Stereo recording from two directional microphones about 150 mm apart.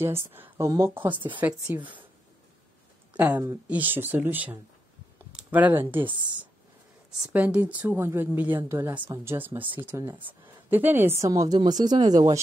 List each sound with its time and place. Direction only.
0.0 s speech: 15° right (ahead or behind)
1.0 s speech: 35° right (ahead or behind)
1.4 s speech: 10° right (ahead or behind)
3.2 s speech: 15° right (ahead or behind)
7.3 s a woman's voice: 10° right (ahead or behind); by 12.4 s 25° right (ahead or behind)